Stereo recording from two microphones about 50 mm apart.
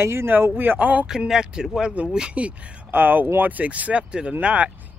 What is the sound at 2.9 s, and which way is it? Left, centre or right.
Speech, right.